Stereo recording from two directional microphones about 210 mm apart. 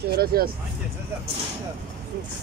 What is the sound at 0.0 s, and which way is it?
Speech, 45° right (ahead or behind).